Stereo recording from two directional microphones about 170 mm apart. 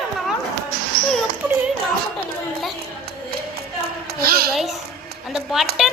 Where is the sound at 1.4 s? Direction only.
10° right (ahead or behind).